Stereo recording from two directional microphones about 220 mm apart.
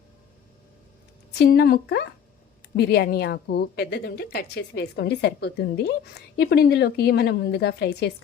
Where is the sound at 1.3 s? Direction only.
45° left (ahead or behind).